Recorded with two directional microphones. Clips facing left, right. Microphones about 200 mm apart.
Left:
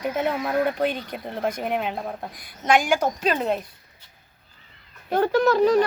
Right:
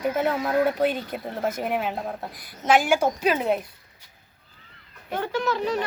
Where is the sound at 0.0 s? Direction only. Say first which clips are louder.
Right 1 dB; 5° right (ahead or behind).